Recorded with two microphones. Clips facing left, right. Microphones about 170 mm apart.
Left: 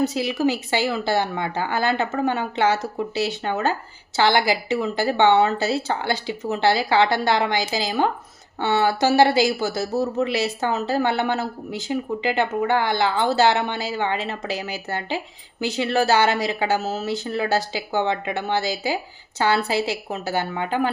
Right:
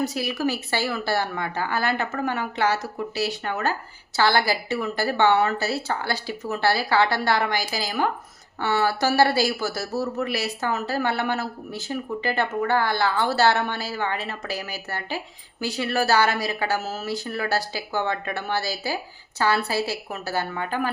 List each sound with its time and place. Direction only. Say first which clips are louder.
0.0 s speech: left 4 dB; 25° left (ahead or behind)